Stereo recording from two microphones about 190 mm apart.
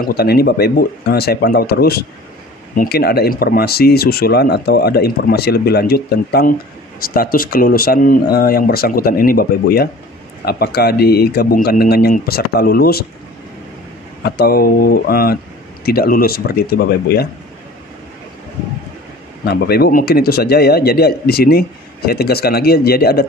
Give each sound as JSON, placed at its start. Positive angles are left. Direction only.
{"t": 0.0, "sound": "speech", "side_deg": 55}
{"t": 14.2, "sound": "speech", "side_deg": 55}
{"t": 19.4, "sound": "speech", "side_deg": 55}